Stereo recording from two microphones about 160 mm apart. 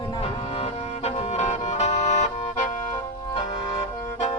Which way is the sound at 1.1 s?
40° left (ahead or behind).